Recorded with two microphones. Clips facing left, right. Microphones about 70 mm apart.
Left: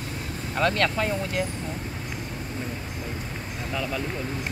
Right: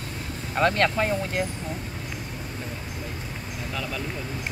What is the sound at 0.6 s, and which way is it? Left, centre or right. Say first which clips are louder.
Speech: right 2 dB; right.